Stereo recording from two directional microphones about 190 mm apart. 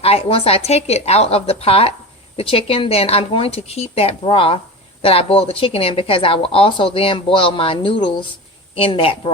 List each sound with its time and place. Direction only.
0.0 s a woman's voice: 30° left (ahead or behind)